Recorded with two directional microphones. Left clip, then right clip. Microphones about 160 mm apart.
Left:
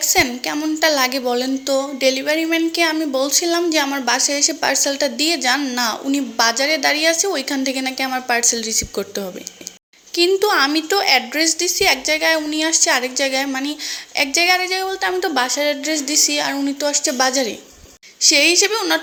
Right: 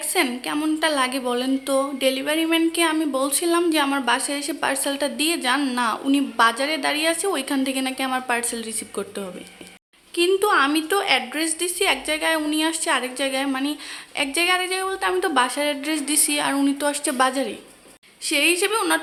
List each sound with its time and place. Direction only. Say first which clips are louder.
0.0 s a sound: left 6 dB; 15° left (ahead or behind)
0.5 s a woman's voice: left 4 dB; 10° left (ahead or behind)
18.6 s a woman's voice: left 3 dB; 10° left (ahead or behind)